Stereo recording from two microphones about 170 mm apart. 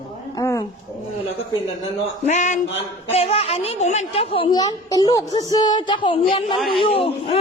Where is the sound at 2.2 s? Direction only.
45° left (ahead or behind).